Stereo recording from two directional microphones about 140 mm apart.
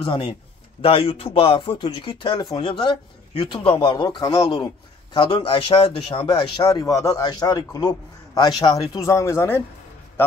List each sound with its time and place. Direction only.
0.0 s a man's voice: 35° left (ahead or behind); by 9.6 s 20° left (ahead or behind)